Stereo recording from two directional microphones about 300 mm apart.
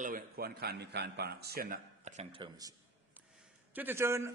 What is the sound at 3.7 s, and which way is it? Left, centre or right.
Speech, centre.